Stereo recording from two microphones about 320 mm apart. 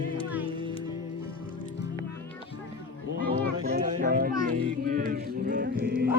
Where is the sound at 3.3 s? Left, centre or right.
Right.